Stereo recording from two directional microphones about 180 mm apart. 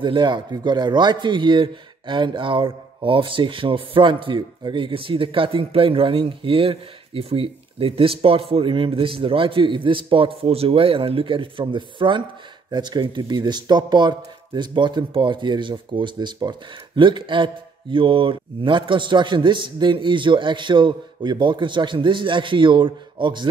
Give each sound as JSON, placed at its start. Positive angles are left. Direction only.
{"t": 0.0, "sound": "speech", "side_deg": -25}